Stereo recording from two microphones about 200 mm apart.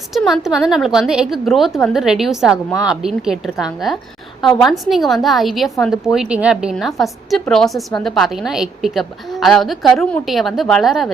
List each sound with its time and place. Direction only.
0.1 s a woman's voice: centre (ahead or behind)